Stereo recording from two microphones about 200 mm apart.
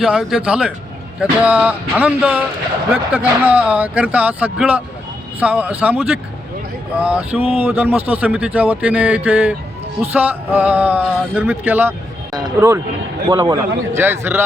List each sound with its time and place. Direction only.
0.0 s a man's voice: centre (ahead or behind)